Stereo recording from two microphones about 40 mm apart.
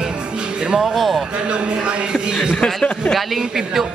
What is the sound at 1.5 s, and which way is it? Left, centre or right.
Speech, right.